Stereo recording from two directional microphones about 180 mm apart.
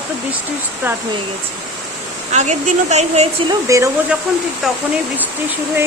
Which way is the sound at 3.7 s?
15° right (ahead or behind).